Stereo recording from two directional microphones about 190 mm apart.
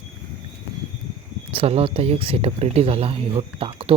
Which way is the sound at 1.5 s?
30° right (ahead or behind).